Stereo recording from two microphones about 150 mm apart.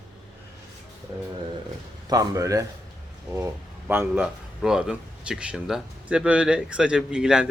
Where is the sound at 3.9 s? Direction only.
15° right (ahead or behind).